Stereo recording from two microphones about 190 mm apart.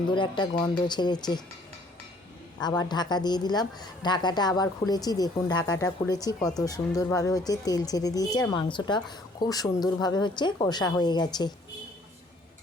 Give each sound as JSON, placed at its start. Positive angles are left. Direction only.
{"t": 0.1, "sound": "speech", "side_deg": 25}
{"t": 2.6, "sound": "speech", "side_deg": 20}